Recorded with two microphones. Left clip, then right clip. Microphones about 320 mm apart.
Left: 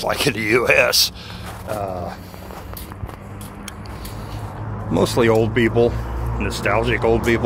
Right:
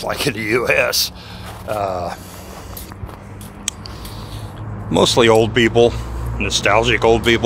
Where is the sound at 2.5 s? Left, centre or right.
Centre.